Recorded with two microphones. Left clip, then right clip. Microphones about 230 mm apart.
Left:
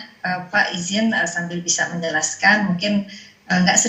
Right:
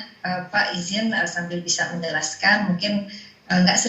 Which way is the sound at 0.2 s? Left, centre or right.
Left.